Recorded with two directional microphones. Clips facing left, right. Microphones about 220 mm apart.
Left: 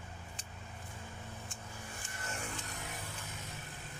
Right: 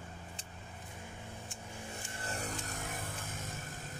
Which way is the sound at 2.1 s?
35° right (ahead or behind).